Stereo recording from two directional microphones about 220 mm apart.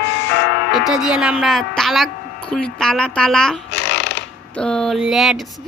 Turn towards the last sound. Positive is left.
turn(degrees=0)  # may be behind; listen again after turning